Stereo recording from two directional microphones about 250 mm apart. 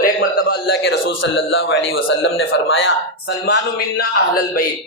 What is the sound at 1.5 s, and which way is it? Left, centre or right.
Speech, left.